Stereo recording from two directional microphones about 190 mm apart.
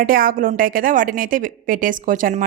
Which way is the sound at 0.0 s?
50° right (ahead or behind).